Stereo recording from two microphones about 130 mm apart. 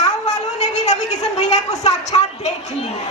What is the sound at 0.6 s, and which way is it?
A woman's voice, 60° left (ahead or behind).